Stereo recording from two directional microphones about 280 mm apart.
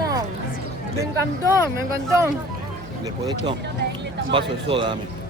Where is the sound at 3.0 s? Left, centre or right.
Centre.